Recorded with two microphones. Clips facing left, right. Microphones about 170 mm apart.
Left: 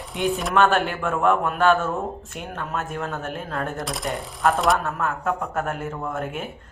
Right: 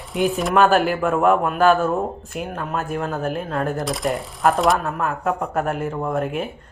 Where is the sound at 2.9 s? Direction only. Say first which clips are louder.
Right 4 dB; 30° right (ahead or behind).